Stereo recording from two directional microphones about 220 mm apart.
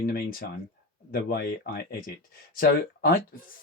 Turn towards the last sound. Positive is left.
turn(degrees=40)  # may be behind; listen again after turning